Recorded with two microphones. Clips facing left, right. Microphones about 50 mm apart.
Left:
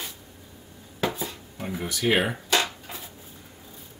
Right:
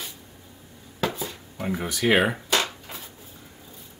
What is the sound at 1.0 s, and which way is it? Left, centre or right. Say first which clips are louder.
Dishes: even; centre.